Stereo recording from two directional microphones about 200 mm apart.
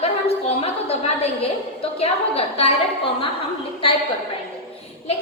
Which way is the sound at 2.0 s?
30° left (ahead or behind).